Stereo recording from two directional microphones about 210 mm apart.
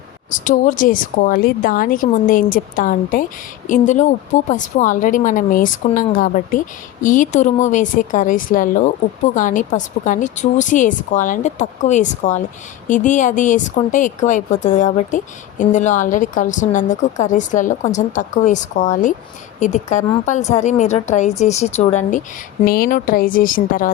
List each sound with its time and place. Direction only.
0.3 s speech: 40° left (ahead or behind)
22.6 s speech: 45° left (ahead or behind)